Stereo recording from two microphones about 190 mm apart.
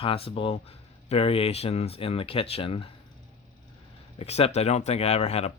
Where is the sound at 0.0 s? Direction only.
30° left (ahead or behind).